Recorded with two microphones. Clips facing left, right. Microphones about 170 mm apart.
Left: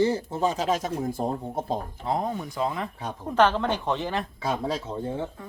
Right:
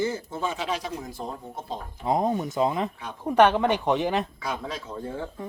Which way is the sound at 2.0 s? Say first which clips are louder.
Right 8 dB; 20° right (ahead or behind).